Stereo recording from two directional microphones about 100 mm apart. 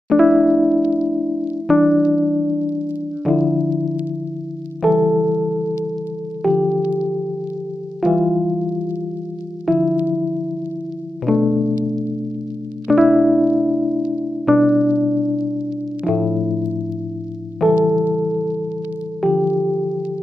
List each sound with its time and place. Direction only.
0.1 s music: centre (ahead or behind)
0.8 s music: 15° right (ahead or behind)
4.8 s electric piano: centre (ahead or behind)
6.4 s music: centre (ahead or behind)
8.0 s music: centre (ahead or behind)
8.5 s music: 15° right (ahead or behind)
9.7 s music: centre (ahead or behind)
9.9 s music: 15° right (ahead or behind)
11.2 s music: centre (ahead or behind)